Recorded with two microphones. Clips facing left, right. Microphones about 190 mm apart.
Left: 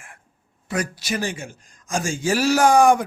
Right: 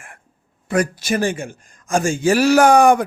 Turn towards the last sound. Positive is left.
turn(degrees=-60)  # may be behind; listen again after turning